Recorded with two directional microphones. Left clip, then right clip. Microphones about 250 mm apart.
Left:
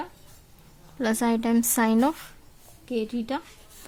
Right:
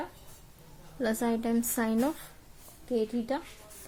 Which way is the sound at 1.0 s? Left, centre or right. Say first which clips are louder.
Left 5 dB; left.